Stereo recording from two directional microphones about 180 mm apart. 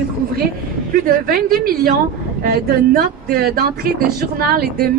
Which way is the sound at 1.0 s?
55° right (ahead or behind).